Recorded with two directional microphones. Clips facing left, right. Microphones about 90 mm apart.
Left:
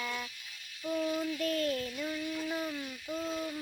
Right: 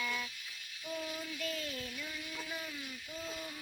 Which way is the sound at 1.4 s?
55° left (ahead or behind).